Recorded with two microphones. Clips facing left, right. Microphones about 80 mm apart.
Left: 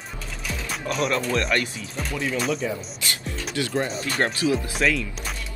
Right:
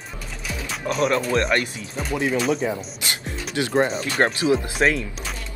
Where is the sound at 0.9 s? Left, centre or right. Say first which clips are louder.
Right 3 dB; right.